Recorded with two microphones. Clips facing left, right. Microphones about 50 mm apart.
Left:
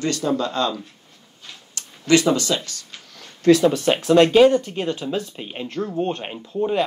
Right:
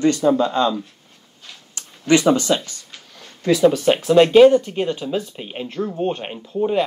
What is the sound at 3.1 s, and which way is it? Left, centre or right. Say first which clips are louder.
Speech: left 4 dB; centre.